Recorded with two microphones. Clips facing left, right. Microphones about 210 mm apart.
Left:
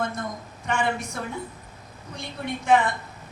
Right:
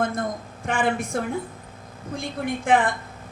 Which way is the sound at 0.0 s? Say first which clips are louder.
Right 4 dB; 50° right (ahead or behind).